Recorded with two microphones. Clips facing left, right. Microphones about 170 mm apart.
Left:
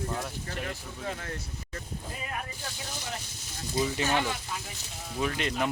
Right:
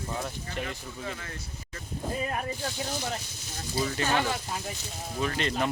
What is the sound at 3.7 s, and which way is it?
Speech, 15° left (ahead or behind).